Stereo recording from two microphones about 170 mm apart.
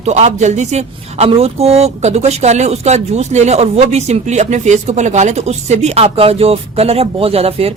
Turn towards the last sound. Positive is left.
turn(degrees=-35)  # may be behind; listen again after turning